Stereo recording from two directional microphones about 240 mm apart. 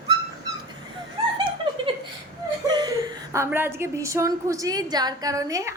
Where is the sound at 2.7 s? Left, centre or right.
Centre.